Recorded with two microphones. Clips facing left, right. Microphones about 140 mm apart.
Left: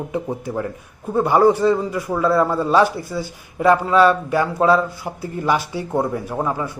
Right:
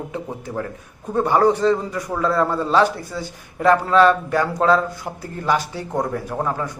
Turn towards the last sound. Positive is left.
turn(degrees=5)  # may be behind; listen again after turning